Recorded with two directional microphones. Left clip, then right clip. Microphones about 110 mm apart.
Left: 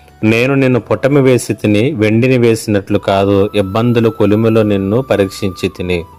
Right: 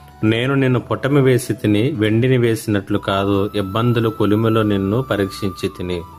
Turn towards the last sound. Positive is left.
turn(degrees=60)  # may be behind; listen again after turning